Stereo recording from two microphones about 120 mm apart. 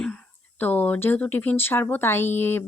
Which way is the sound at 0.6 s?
15° left (ahead or behind).